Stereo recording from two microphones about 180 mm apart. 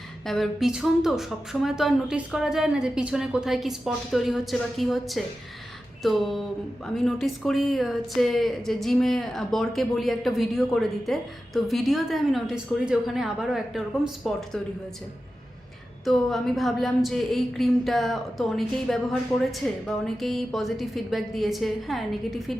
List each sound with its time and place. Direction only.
0.3 s speech: centre (ahead or behind)
16.0 s speech: centre (ahead or behind)